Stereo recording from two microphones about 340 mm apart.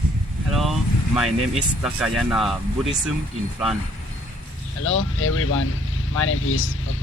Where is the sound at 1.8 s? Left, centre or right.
Centre.